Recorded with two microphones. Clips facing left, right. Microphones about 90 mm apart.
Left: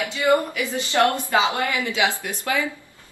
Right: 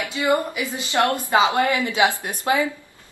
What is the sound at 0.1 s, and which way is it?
A woman's voice, 20° right (ahead or behind).